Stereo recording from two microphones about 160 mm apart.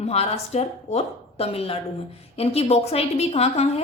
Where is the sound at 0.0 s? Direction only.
40° left (ahead or behind).